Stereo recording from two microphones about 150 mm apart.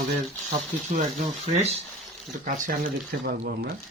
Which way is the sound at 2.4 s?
60° right (ahead or behind).